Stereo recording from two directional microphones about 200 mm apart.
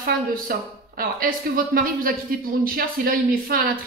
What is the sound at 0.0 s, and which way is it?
A woman's voice, 45° right (ahead or behind).